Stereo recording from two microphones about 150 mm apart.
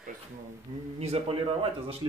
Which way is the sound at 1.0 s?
40° right (ahead or behind).